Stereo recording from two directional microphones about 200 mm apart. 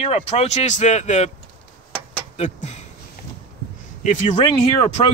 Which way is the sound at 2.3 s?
35° left (ahead or behind).